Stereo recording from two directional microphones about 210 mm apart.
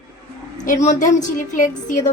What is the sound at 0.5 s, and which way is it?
A woman's voice, 35° left (ahead or behind).